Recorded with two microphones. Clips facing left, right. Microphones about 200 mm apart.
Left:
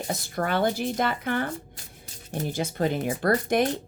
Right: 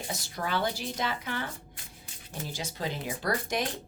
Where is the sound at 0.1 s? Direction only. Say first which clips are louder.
Left 6 dB; 55° left (ahead or behind).